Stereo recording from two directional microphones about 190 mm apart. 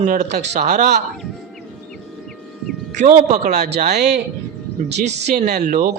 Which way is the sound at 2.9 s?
40° right (ahead or behind).